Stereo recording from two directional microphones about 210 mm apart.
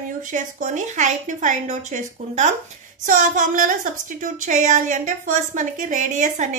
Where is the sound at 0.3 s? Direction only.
35° right (ahead or behind).